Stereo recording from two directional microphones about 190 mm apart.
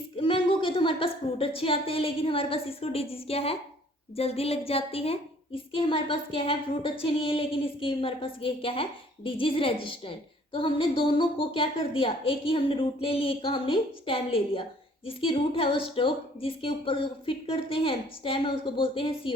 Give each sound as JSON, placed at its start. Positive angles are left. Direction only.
{"t": 0.2, "sound": "a woman's voice", "side_deg": 25}